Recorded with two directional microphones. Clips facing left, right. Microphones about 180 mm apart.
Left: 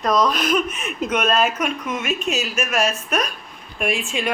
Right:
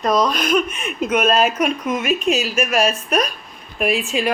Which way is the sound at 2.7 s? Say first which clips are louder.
Right 2 dB; 35° right (ahead or behind).